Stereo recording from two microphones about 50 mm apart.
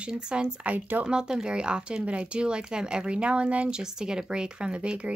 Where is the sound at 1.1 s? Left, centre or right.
Centre.